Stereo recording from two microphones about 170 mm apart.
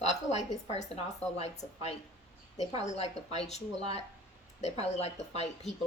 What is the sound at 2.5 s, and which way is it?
A woman's voice, 40° left (ahead or behind).